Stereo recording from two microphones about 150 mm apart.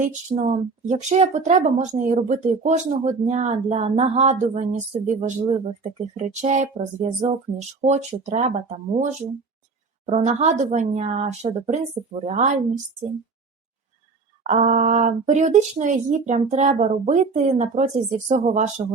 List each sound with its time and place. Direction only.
0.0 s a woman's voice: 55° right (ahead or behind)
14.4 s a woman's voice: 55° right (ahead or behind)